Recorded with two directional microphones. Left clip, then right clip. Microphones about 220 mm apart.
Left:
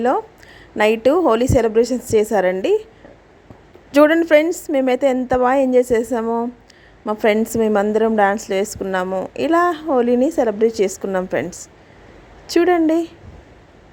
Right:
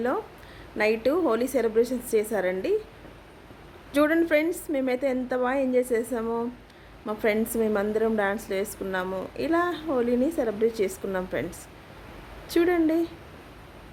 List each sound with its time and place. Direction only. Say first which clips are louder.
0.8 s a woman's voice: left 9 dB; 35° left (ahead or behind)
3.9 s a woman's voice: left 10 dB; 35° left (ahead or behind)
12.5 s a woman's voice: left 8 dB; 35° left (ahead or behind)